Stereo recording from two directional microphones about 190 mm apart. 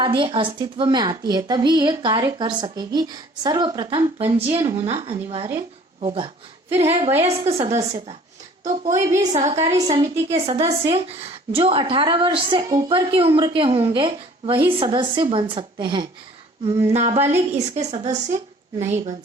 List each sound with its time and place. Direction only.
0.0 s a woman's voice: 25° right (ahead or behind)